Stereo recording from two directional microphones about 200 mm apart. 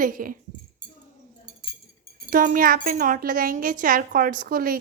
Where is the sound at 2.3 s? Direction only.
45° right (ahead or behind).